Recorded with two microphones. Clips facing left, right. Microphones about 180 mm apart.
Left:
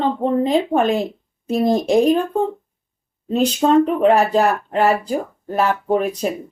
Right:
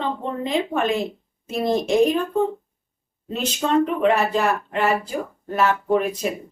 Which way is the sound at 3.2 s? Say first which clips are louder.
Left 8 dB; 35° left (ahead or behind).